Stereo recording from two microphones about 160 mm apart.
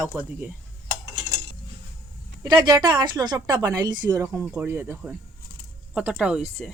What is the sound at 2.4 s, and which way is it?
A woman's voice, 30° right (ahead or behind).